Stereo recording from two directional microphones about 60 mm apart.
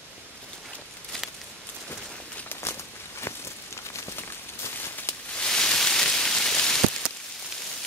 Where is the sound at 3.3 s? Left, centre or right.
Left.